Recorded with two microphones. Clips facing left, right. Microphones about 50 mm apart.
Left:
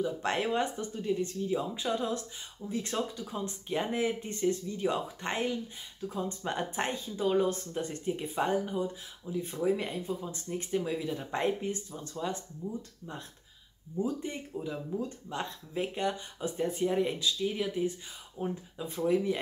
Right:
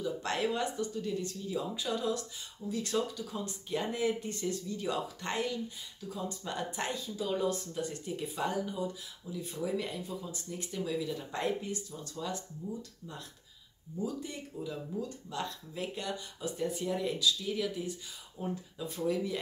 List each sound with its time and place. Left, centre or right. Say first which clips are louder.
0.0 s speech: left 2 dB; left
13.9 s speech: left 4 dB; left